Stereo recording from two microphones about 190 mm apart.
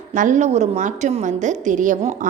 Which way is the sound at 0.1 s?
40° right (ahead or behind).